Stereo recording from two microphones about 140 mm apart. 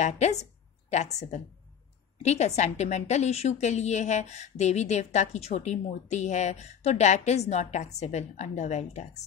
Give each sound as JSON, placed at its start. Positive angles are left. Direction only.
{"t": 0.0, "sound": "a woman's voice", "side_deg": 55}